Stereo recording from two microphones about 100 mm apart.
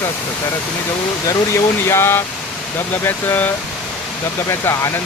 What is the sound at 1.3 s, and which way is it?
Speech, 25° left (ahead or behind).